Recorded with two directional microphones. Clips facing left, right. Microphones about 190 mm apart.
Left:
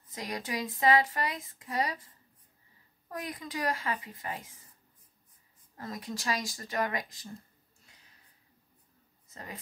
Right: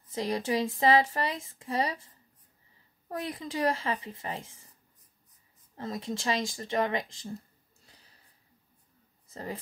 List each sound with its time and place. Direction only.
0.1 s speech: 30° right (ahead or behind)
3.1 s speech: 25° right (ahead or behind)
5.8 s speech: 25° right (ahead or behind)
7.8 s a sound: 35° right (ahead or behind)
9.3 s speech: 30° right (ahead or behind)